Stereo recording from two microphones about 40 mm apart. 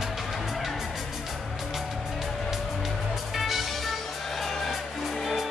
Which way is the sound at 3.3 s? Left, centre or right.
Centre.